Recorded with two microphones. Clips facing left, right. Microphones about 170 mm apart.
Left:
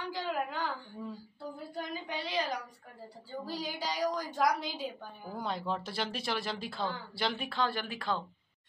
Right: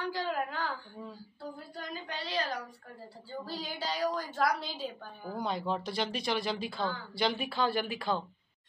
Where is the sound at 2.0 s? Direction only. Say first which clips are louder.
Even; 15° left (ahead or behind).